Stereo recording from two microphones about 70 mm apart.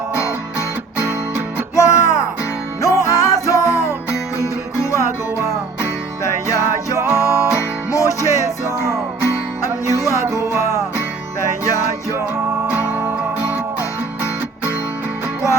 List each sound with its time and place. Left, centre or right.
1.7 s music: left
7.0 s music: right
7.9 s music: left
9.9 s music: left